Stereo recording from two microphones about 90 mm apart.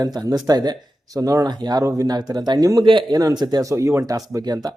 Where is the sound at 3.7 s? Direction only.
30° right (ahead or behind).